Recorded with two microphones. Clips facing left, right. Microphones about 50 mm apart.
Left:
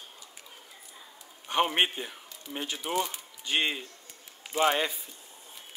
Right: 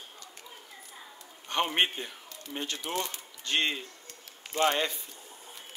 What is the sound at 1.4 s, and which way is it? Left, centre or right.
Speech, centre.